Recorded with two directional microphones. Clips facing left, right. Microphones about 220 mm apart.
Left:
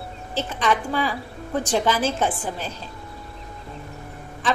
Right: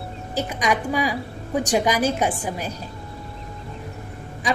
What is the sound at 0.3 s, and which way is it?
A woman's voice, 15° right (ahead or behind).